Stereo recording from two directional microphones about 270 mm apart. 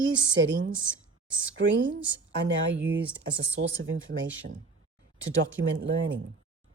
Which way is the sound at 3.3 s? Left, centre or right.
Right.